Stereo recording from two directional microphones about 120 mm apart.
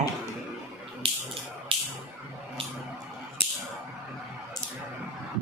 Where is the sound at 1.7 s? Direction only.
50° right (ahead or behind).